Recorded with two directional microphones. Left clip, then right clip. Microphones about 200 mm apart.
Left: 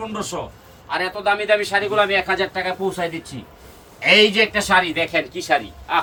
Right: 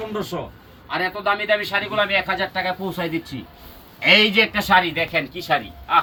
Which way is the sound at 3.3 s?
15° left (ahead or behind).